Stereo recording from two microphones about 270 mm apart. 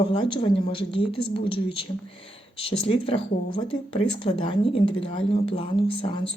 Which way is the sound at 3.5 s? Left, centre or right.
Centre.